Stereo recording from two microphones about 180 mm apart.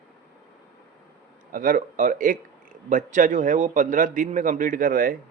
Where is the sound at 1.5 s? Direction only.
50° right (ahead or behind).